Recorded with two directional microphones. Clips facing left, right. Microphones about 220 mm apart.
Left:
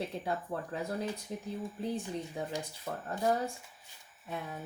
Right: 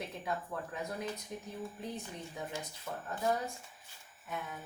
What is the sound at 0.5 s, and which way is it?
Speech, 30° left (ahead or behind).